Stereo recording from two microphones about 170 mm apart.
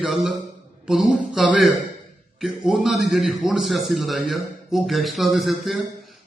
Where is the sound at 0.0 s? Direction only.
Centre (ahead or behind).